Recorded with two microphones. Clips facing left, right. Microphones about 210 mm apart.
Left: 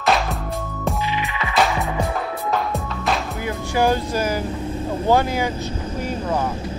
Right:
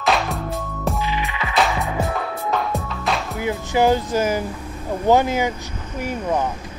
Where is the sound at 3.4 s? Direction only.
20° right (ahead or behind).